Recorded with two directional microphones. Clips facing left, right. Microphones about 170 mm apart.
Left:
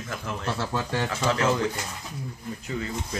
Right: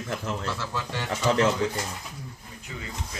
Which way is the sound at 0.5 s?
60° left (ahead or behind).